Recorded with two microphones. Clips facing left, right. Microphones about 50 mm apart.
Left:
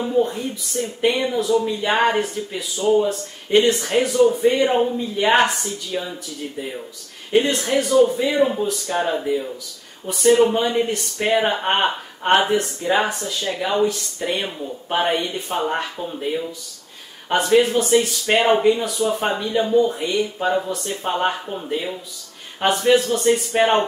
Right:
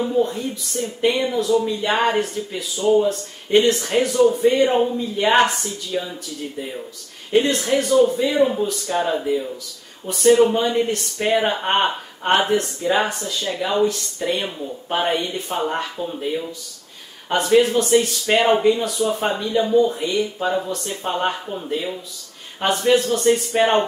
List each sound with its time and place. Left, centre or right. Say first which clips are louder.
0.0 s speech: even; centre
7.3 s speech: even; centre
17.3 s speech: even; centre